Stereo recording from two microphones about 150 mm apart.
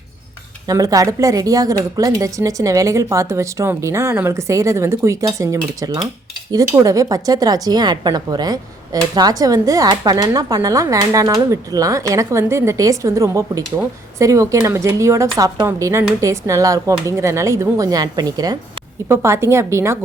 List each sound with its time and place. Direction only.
0.7 s a woman's voice: 25° right (ahead or behind)